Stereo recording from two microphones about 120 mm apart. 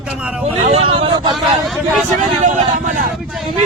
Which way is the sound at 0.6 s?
55° right (ahead or behind).